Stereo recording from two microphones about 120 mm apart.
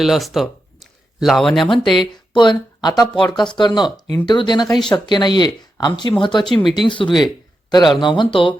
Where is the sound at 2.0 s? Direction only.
40° left (ahead or behind).